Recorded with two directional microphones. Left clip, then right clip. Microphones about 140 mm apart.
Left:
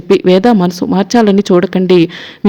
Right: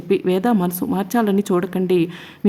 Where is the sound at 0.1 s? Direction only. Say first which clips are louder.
Left 10 dB; 35° left (ahead or behind).